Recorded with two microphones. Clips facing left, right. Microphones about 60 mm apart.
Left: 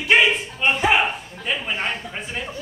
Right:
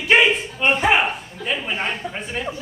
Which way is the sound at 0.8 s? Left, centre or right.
Centre.